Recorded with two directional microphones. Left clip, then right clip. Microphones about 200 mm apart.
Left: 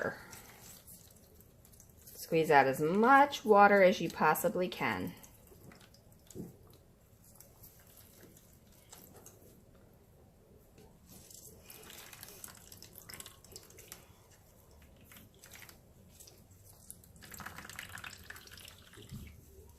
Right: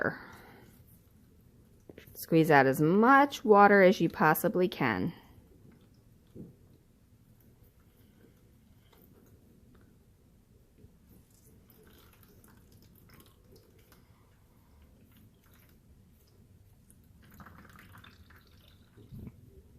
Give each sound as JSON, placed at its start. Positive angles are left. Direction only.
{"t": 2.2, "sound": "speech", "side_deg": -55}